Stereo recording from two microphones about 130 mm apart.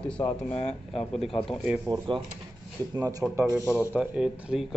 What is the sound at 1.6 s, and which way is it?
Speech, 10° right (ahead or behind).